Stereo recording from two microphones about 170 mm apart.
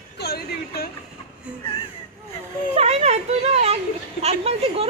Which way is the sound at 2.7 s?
40° right (ahead or behind).